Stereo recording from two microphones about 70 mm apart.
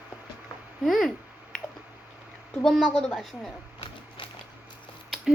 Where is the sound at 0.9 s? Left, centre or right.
Centre.